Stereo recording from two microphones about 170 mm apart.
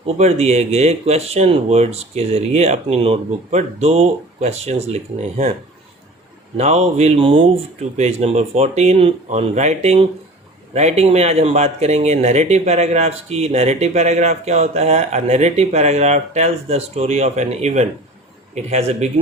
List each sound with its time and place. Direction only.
0.2 s speech: 40° right (ahead or behind)
6.6 s speech: 40° right (ahead or behind)